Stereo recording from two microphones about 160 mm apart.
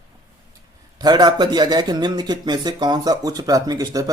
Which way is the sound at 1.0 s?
25° right (ahead or behind).